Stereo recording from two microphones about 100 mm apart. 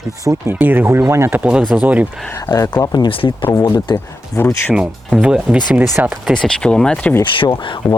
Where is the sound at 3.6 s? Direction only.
50° left (ahead or behind).